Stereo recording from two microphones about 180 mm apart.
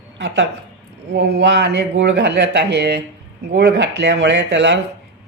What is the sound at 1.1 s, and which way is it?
Speech, 70° right (ahead or behind).